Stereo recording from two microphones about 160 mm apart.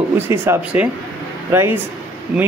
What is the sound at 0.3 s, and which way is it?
Speech, 15° right (ahead or behind).